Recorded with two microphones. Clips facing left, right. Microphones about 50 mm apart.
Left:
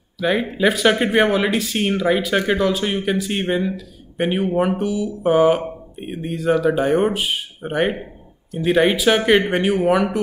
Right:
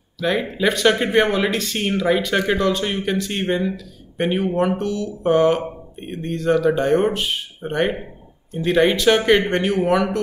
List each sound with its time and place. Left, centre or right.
0.2 s speech: centre